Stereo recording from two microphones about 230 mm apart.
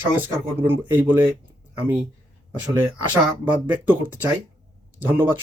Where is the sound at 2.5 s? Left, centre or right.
Centre.